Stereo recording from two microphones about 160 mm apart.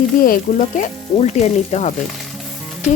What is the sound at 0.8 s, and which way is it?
Sizzle, 45° left (ahead or behind).